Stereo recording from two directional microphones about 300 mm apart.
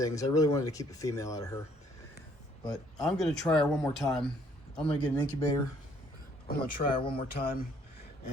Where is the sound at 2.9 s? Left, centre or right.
Centre.